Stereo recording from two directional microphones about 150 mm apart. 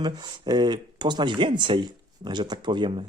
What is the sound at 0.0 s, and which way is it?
Speech, 30° right (ahead or behind).